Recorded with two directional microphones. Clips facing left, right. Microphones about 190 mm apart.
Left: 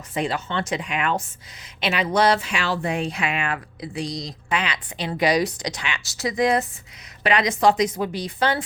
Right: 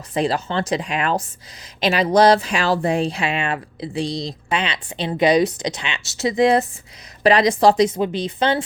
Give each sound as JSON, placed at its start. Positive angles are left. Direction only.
{"t": 0.1, "sound": "speech", "side_deg": -35}